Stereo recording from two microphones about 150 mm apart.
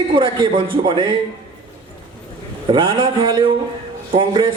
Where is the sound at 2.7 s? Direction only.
35° right (ahead or behind).